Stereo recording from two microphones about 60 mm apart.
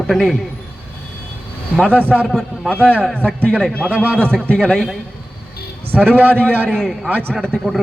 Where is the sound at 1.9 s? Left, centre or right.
Right.